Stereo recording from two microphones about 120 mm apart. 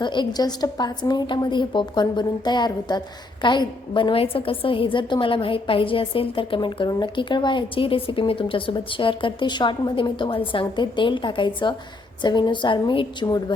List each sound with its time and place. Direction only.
0.0 s a woman's voice: 40° left (ahead or behind)